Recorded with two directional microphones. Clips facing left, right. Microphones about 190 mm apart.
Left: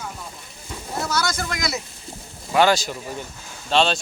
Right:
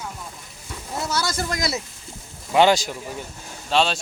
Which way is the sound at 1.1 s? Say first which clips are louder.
Right 1 dB; 30° right (ahead or behind).